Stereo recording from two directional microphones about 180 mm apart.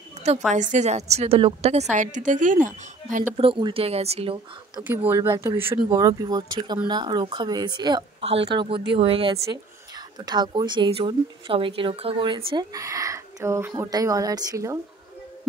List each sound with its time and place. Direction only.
0.5 s a woman's voice: 40° right (ahead or behind)
3.3 s a woman's voice: 30° right (ahead or behind)
4.8 s a woman's voice: 10° right (ahead or behind)